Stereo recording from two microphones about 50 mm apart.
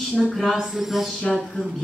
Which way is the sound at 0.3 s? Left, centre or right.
Centre.